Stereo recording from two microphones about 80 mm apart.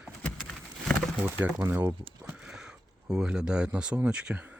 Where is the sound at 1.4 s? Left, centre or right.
Right.